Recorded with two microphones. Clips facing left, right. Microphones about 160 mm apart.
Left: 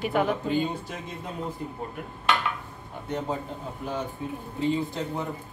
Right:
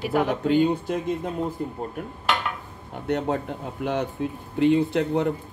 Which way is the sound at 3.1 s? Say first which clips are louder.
Right 6 dB; 70° right (ahead or behind).